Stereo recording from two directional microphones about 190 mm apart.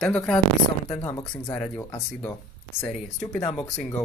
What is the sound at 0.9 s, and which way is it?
Speech, 15° left (ahead or behind).